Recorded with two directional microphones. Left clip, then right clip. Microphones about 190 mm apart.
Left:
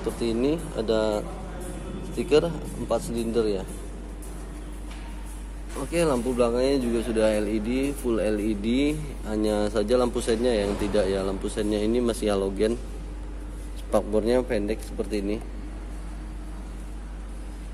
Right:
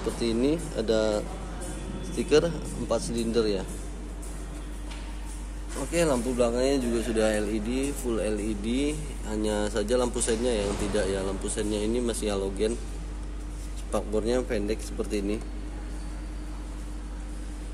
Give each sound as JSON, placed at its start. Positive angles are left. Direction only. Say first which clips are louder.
{"t": 0.2, "sound": "speech", "louder": "left 1 dB", "side_deg": 0}
{"t": 5.8, "sound": "speech", "louder": "left 1 dB", "side_deg": 10}
{"t": 13.9, "sound": "a man's voice", "louder": "left 5 dB", "side_deg": 20}
{"t": 14.7, "sound": "speech", "louder": "left 1 dB", "side_deg": 5}